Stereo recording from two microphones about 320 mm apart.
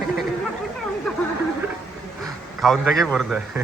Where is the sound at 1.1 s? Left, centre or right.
Centre.